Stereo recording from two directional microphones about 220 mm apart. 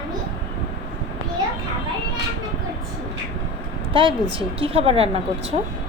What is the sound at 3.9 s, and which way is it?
A child's voice, 25° right (ahead or behind).